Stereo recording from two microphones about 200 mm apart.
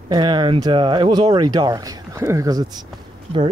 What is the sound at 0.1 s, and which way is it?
Speech, 25° right (ahead or behind).